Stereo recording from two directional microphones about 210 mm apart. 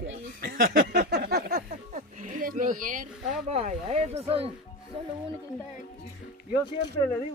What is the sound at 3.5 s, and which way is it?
Speech, 30° right (ahead or behind).